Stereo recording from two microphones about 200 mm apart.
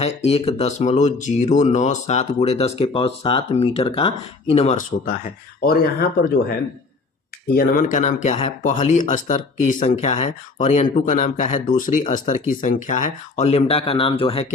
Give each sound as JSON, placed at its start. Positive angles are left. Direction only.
{"t": 0.0, "sound": "speech", "side_deg": 30}
{"t": 5.0, "sound": "speech", "side_deg": 45}
{"t": 7.5, "sound": "speech", "side_deg": 45}